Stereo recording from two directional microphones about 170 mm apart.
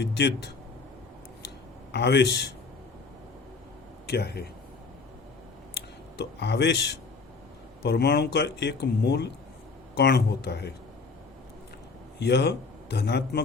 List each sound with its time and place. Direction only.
0.0 s a man's voice: 85° left
1.9 s a man's voice: 80° left
4.0 s speech: 70° left (ahead or behind)
6.1 s a man's voice: 85° left
7.9 s speech: 70° left (ahead or behind)
12.2 s a man's voice: 75° left (ahead or behind)